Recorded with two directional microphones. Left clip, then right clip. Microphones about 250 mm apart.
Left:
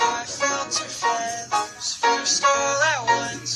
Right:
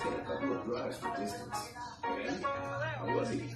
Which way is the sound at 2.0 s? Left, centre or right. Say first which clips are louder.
Left 16 dB; left.